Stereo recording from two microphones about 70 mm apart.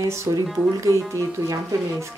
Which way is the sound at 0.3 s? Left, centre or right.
Right.